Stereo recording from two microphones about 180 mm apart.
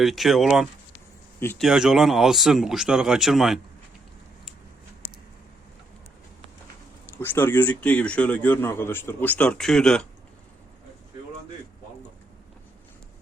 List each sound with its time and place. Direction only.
0.0 s speech: centre (ahead or behind)
1.4 s speech: 10° left (ahead or behind)
1.6 s speech: centre (ahead or behind)
7.2 s speech: 10° left (ahead or behind)